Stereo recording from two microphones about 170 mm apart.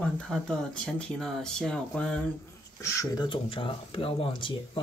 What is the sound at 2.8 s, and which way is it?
Speech, 20° left (ahead or behind).